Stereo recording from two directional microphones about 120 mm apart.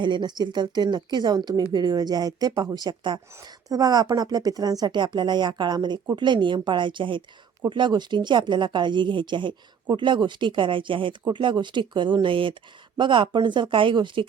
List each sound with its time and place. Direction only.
0.0 s a woman's voice: 40° right (ahead or behind)